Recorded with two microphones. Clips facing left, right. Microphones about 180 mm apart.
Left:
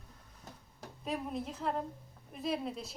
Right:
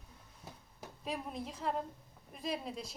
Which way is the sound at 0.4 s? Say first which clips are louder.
Even; 10° right (ahead or behind).